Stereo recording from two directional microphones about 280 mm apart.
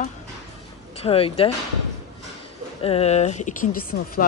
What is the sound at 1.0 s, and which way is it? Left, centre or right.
Speech, centre.